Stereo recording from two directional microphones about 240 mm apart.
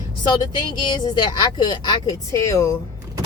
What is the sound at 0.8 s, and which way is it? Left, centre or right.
A woman's voice, centre.